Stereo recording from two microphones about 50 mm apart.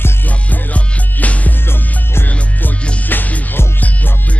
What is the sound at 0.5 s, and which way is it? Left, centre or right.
Music, left.